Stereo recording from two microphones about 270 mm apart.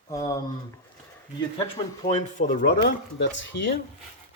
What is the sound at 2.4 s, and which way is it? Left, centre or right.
Speech, left.